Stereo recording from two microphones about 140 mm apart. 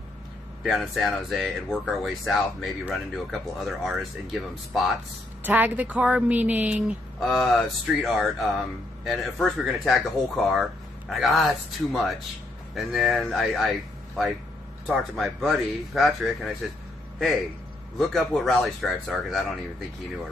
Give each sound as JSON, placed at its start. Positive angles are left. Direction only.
{"t": 0.7, "sound": "speech", "side_deg": 0}
{"t": 5.4, "sound": "speech", "side_deg": -10}
{"t": 7.2, "sound": "speech", "side_deg": 0}
{"t": 17.9, "sound": "speech", "side_deg": 0}